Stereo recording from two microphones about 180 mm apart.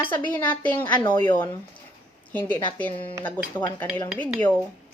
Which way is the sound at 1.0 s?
25° left (ahead or behind).